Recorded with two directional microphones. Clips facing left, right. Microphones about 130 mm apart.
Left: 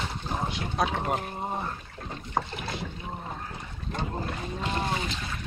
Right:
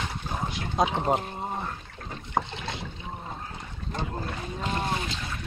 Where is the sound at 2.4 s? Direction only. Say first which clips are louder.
Right 2 dB; 20° right (ahead or behind).